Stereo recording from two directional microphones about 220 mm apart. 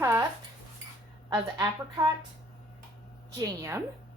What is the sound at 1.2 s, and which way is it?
Speech, 15° right (ahead or behind).